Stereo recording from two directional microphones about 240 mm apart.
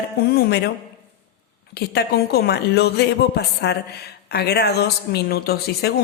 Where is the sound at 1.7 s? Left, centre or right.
Left.